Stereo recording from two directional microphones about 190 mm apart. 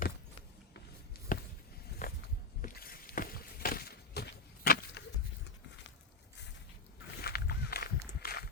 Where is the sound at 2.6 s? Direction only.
50° left (ahead or behind).